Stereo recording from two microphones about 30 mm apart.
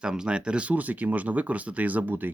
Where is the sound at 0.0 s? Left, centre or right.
Right.